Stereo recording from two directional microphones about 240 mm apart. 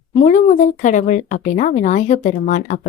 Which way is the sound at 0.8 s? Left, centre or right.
Left.